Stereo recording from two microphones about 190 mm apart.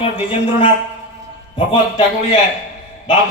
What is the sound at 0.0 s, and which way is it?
A man's voice, 25° left (ahead or behind).